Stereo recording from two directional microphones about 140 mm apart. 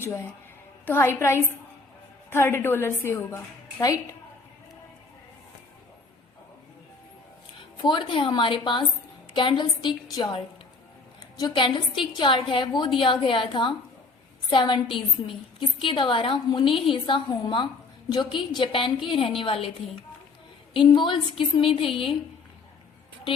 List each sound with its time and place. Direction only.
0.0 s a woman's voice: 20° left (ahead or behind)
7.8 s a woman's voice: 35° left (ahead or behind)
20.7 s a woman's voice: 35° left (ahead or behind)